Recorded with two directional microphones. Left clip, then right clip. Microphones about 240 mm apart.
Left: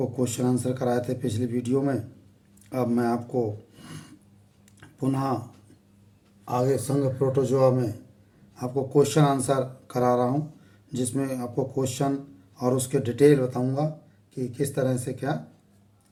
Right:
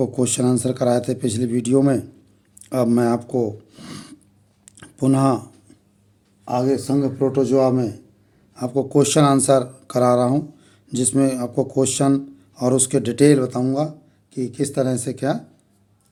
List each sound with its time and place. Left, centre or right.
0.0 s a man's voice: right
4.8 s a sound: right
6.4 s a man's voice: right